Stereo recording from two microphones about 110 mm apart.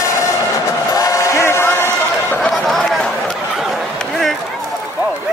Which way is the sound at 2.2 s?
10° left (ahead or behind).